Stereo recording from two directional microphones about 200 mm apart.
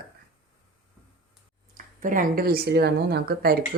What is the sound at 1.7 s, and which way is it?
Speech, 40° right (ahead or behind).